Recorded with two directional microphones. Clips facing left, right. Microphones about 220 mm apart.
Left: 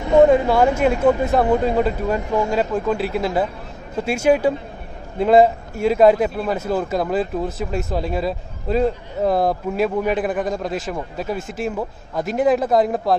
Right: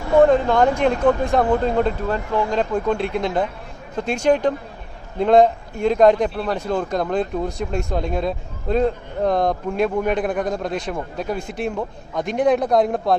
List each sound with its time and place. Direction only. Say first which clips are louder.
0.0 s vehicle: left 1 dB; 20° left (ahead or behind)
0.3 s a man's voice: left 1 dB; 5° left (ahead or behind)